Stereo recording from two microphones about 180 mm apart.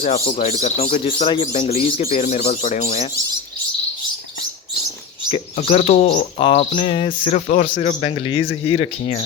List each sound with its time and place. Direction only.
0.0 s speech: 35° left (ahead or behind)
1.0 s speech: 30° left (ahead or behind)
5.3 s speech: 35° left (ahead or behind)